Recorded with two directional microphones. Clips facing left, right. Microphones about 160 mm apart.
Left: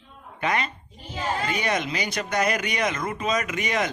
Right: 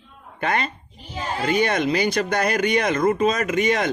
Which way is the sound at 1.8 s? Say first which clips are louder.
Right 8 dB; 35° right (ahead or behind).